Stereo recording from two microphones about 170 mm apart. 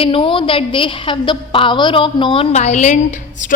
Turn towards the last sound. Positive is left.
turn(degrees=45)  # may be behind; listen again after turning